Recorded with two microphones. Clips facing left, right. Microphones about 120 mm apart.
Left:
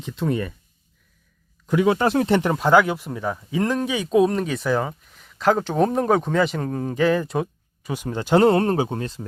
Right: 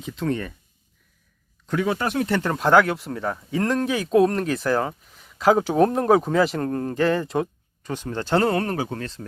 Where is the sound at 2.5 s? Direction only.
Centre (ahead or behind).